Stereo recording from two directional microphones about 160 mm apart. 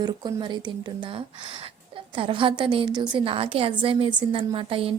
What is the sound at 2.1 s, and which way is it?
A woman's voice, 30° right (ahead or behind).